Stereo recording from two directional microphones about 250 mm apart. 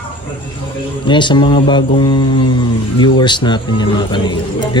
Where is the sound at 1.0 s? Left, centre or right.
Centre.